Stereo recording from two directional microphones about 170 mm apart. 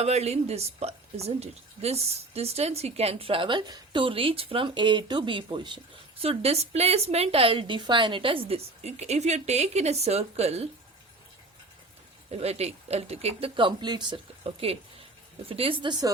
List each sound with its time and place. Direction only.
0.0 s a woman's voice: 40° right (ahead or behind)
12.3 s a woman's voice: 40° right (ahead or behind)